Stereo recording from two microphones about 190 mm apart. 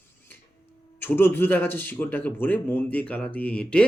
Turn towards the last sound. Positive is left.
turn(degrees=5)  # may be behind; listen again after turning